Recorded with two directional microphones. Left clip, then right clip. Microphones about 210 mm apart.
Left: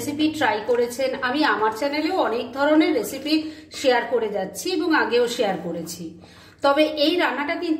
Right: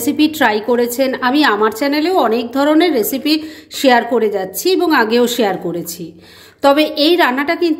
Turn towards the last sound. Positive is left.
turn(degrees=-50)  # may be behind; listen again after turning